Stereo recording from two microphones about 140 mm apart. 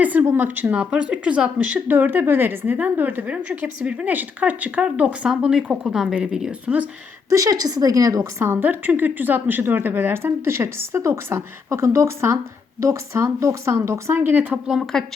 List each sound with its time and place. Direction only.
0.0 s a woman's voice: 10° right (ahead or behind)
7.3 s a woman's voice: 25° right (ahead or behind)
14.7 s a woman's voice: centre (ahead or behind)